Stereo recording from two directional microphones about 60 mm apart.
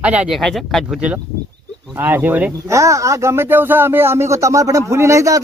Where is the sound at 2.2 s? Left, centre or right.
Right.